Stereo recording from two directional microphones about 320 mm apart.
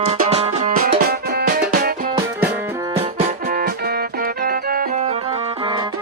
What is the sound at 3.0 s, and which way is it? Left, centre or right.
Music, right.